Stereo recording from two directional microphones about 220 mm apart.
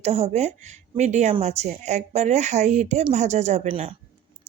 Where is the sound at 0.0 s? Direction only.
30° right (ahead or behind).